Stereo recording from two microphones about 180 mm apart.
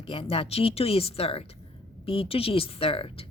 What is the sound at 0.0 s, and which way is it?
A woman's voice, 30° left (ahead or behind).